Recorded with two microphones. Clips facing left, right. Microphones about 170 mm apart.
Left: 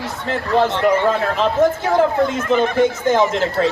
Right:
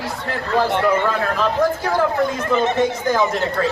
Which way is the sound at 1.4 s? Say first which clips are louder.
Left 3 dB; 20° left (ahead or behind).